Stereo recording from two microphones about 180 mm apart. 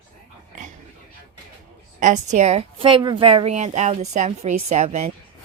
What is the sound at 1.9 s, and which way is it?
A woman's voice, 45° right (ahead or behind).